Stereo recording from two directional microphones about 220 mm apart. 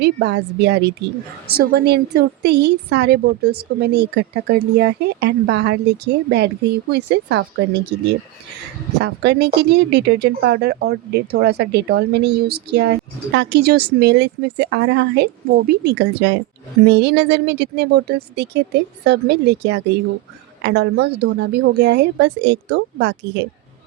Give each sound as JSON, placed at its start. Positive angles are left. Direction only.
{"t": 0.0, "sound": "speech", "side_deg": -50}